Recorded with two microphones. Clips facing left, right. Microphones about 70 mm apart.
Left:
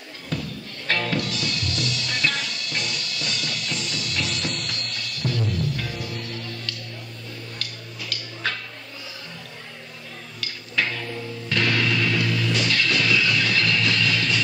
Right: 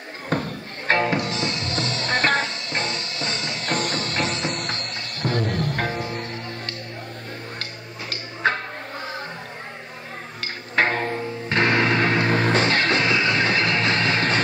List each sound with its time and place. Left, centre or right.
0.3 s music: right
3.7 s music: right
8.1 s music: right
10.4 s music: right